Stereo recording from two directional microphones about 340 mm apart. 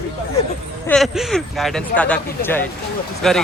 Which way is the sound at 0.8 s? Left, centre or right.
Centre.